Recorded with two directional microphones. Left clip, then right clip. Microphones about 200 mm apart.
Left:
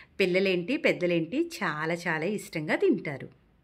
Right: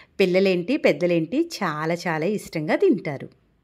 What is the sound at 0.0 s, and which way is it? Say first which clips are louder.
A woman's voice: right 6 dB; 35° right (ahead or behind).